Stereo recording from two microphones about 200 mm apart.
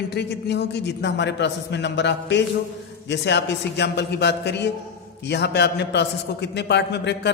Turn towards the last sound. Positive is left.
turn(degrees=60)  # may be behind; listen again after turning